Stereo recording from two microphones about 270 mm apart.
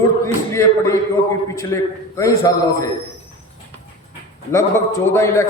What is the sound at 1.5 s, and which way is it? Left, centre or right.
A man's voice, centre.